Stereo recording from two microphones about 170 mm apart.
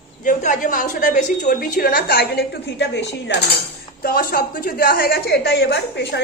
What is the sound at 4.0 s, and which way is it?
A woman's voice, 60° left (ahead or behind).